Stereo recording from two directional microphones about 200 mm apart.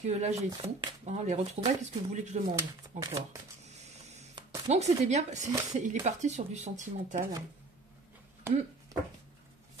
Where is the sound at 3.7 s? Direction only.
35° right (ahead or behind).